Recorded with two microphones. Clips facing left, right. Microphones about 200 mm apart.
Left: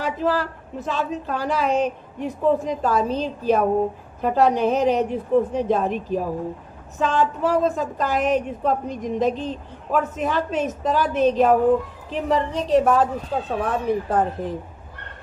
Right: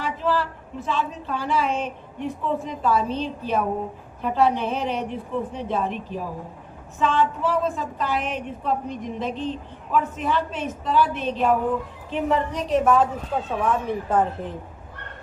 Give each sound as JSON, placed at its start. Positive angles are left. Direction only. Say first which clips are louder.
{"t": 0.0, "sound": "a woman's voice", "louder": "left 2 dB", "side_deg": 40}